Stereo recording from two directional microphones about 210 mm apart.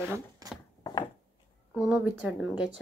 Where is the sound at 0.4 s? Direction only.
20° right (ahead or behind).